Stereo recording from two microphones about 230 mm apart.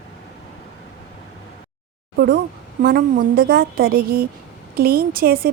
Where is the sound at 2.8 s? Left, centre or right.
Right.